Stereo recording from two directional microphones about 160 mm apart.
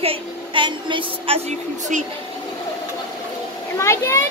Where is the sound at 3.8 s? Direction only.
15° left (ahead or behind).